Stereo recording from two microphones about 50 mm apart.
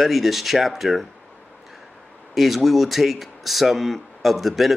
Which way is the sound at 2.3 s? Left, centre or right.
Centre.